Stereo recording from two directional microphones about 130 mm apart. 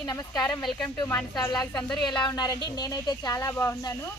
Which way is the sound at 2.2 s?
30° left (ahead or behind).